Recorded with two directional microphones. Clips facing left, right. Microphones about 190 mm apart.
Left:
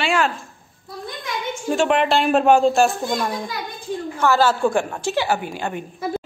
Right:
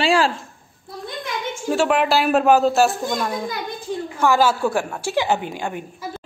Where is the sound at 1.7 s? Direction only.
5° right (ahead or behind).